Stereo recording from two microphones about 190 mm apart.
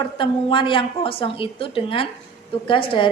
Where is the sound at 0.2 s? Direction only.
25° left (ahead or behind).